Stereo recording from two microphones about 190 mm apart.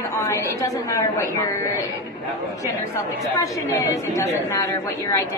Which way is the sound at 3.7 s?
15° left (ahead or behind).